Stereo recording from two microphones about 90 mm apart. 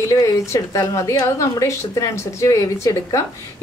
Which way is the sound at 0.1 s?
35° left (ahead or behind).